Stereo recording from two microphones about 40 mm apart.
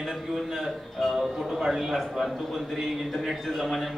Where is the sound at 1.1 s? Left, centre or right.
Centre.